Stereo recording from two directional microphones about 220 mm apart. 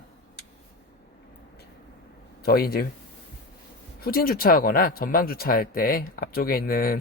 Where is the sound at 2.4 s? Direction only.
45° left (ahead or behind).